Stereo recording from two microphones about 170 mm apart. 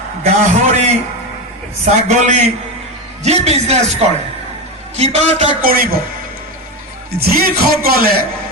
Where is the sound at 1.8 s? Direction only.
45° right (ahead or behind).